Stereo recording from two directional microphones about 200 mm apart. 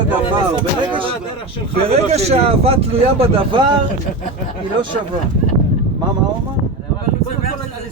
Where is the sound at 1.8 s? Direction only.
30° right (ahead or behind).